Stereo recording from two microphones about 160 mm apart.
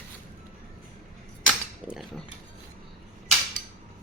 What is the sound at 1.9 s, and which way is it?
Speech, centre (ahead or behind).